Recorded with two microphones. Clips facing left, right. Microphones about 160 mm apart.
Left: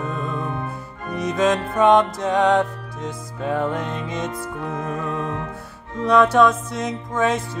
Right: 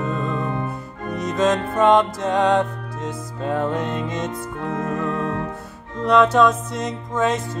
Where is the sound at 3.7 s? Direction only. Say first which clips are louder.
Right 2 dB; 20° right (ahead or behind).